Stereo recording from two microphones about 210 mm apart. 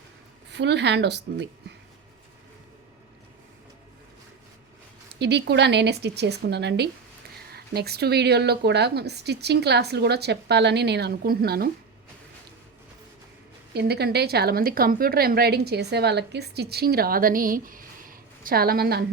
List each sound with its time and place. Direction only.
0.5 s speech: 55° right (ahead or behind)
5.2 s speech: 55° right (ahead or behind)
13.7 s speech: 50° right (ahead or behind)